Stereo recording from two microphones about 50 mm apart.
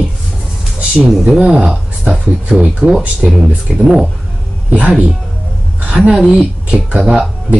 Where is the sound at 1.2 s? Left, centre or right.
Centre.